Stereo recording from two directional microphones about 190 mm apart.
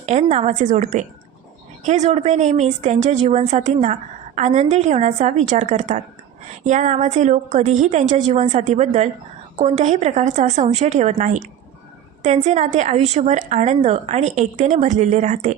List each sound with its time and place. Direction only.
0.0 s a woman's voice: 35° right (ahead or behind)